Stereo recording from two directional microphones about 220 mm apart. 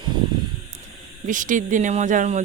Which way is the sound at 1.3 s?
35° right (ahead or behind).